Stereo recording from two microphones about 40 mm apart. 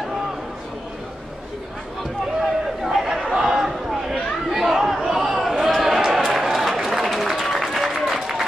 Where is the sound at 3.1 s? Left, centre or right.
Centre.